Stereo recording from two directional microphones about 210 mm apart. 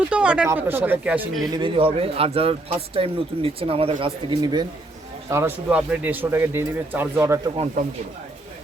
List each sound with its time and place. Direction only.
0.1 s a man's voice: 5° right (ahead or behind)
1.5 s a man's voice: 25° right (ahead or behind)
5.3 s a man's voice: 10° right (ahead or behind)